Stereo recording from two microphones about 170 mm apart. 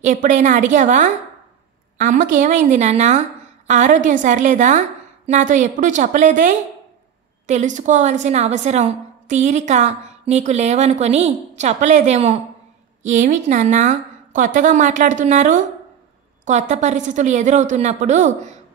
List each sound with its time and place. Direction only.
0.0 s a woman's voice: 45° right (ahead or behind)